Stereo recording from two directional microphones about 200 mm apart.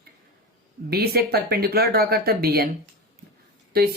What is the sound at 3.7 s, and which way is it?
Speech, 50° right (ahead or behind).